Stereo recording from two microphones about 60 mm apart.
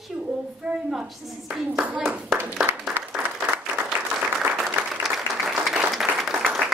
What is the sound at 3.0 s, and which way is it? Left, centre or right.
Applause, right.